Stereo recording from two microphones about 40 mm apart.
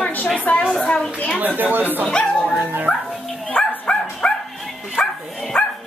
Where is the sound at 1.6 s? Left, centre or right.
Right.